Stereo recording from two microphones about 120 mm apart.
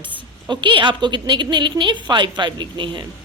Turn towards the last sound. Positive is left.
turn(degrees=-40)  # may be behind; listen again after turning